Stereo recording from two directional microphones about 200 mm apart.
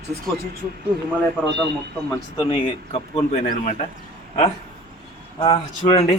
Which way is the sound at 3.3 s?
40° left (ahead or behind).